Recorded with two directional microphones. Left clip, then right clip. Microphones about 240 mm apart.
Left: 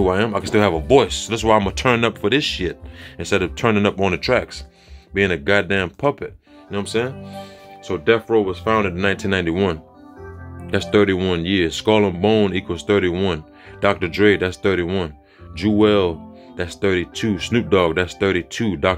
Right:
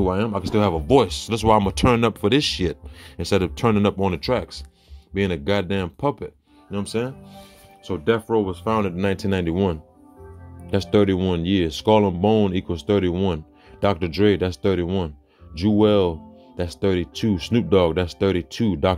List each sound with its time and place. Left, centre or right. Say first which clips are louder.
0.0 s speech: left 4 dB; centre